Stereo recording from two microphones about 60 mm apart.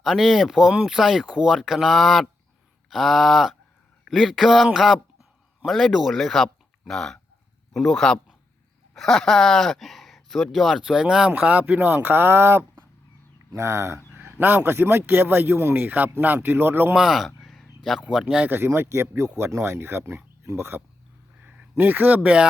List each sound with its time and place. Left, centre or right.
0.0 s speech: centre
10.8 s speech: centre; by 12.6 s right
13.5 s speech: right
14.3 s speech: right
16.9 s a sound: centre
18.1 s speech: centre
18.4 s speech: right